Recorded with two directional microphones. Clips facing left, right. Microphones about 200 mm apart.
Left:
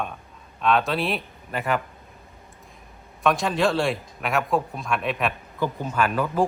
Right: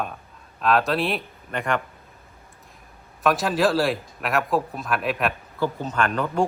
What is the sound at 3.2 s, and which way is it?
Speech, centre (ahead or behind).